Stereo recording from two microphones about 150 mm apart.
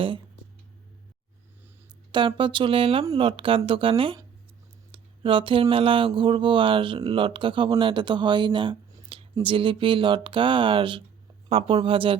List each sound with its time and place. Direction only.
2.1 s mantra: 35° right (ahead or behind)